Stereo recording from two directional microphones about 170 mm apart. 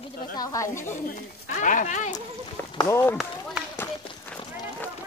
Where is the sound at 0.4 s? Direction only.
20° left (ahead or behind).